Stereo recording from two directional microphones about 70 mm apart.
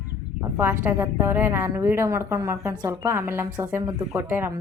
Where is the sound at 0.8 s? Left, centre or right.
Right.